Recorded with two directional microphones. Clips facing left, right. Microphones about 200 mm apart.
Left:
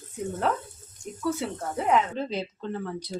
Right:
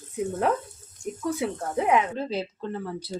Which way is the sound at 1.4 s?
15° right (ahead or behind).